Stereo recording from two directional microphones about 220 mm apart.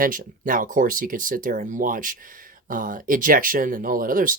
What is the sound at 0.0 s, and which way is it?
Speech, 40° right (ahead or behind).